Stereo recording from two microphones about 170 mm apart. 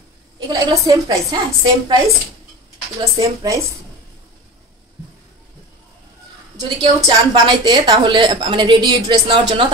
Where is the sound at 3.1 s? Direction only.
20° right (ahead or behind).